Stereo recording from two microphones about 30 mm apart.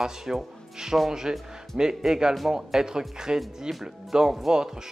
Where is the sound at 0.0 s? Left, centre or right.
Centre.